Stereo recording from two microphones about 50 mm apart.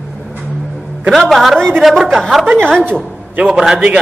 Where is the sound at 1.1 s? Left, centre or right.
Centre.